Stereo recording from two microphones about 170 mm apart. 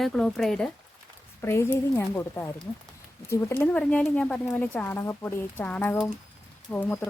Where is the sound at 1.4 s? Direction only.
15° left (ahead or behind).